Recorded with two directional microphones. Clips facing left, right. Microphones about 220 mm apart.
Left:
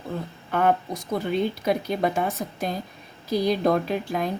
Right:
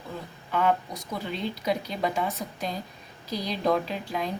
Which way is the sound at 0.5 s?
50° left (ahead or behind).